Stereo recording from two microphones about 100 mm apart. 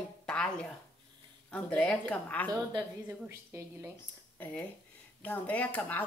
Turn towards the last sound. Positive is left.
turn(degrees=15)  # may be behind; listen again after turning